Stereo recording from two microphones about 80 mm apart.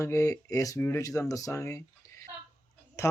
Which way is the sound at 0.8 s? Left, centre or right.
Left.